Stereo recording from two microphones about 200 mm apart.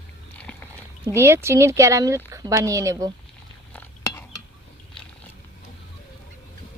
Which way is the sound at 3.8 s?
15° left (ahead or behind).